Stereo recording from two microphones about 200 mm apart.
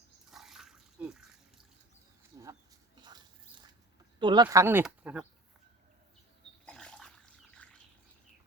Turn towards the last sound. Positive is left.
turn(degrees=5)  # may be behind; listen again after turning